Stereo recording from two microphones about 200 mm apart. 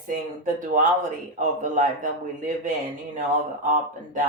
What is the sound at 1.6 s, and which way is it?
Speech, 40° right (ahead or behind).